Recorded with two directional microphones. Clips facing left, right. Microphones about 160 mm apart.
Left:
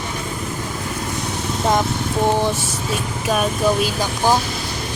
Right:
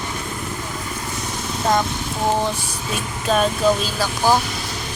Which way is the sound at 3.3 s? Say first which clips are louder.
Right 1 dB; 10° left (ahead or behind).